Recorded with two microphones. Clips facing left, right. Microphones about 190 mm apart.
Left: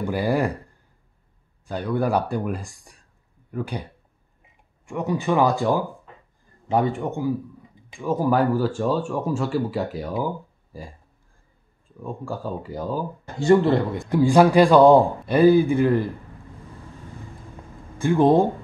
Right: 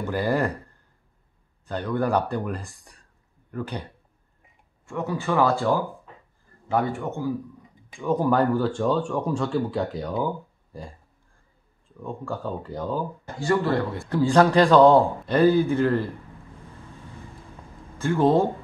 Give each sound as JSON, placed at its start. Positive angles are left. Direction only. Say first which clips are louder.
{"t": 0.0, "sound": "speech", "louder": "left 2 dB", "side_deg": 10}
{"t": 1.7, "sound": "speech", "louder": "left 1 dB", "side_deg": 10}
{"t": 4.8, "sound": "a man's voice", "louder": "left 3 dB", "side_deg": 15}
{"t": 12.0, "sound": "speech", "louder": "left 1 dB", "side_deg": 10}
{"t": 13.4, "sound": "a man's voice", "louder": "left 6 dB", "side_deg": 25}
{"t": 14.0, "sound": "speech", "louder": "left 3 dB", "side_deg": 10}
{"t": 17.9, "sound": "speech", "louder": "left 3 dB", "side_deg": 15}